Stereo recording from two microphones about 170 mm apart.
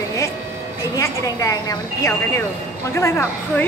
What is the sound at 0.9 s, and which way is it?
A woman's voice, 20° left (ahead or behind).